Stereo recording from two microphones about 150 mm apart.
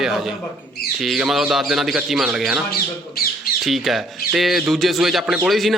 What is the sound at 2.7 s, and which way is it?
Speech, 90° left.